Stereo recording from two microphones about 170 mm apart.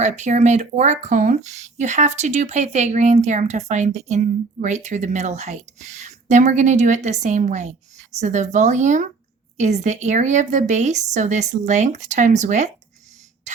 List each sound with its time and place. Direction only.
0.0 s speech: 45° right (ahead or behind)